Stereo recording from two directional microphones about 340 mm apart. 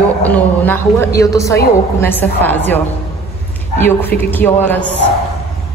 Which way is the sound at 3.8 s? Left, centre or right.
Centre.